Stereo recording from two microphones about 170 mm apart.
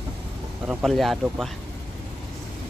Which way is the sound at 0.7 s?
Centre (ahead or behind).